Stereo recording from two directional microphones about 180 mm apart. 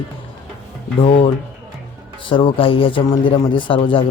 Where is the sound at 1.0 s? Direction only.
30° left (ahead or behind).